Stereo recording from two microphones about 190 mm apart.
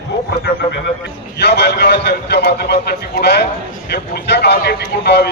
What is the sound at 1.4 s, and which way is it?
A man's voice, 65° left (ahead or behind).